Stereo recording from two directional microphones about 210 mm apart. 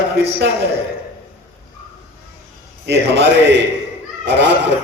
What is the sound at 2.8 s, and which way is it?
A man's voice, 55° right (ahead or behind).